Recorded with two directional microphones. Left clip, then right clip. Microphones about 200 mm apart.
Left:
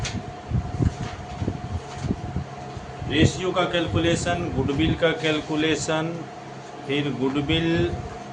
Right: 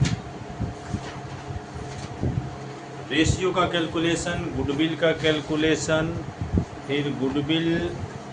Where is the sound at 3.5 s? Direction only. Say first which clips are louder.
Even; 15° left (ahead or behind).